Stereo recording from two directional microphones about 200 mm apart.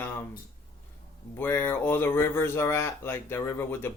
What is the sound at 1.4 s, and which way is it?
Speech, 10° left (ahead or behind).